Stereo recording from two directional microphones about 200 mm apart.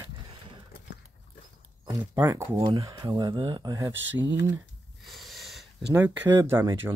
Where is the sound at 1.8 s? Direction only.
10° right (ahead or behind).